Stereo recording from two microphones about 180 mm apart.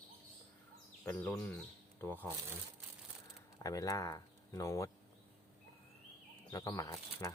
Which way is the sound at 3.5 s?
20° left (ahead or behind).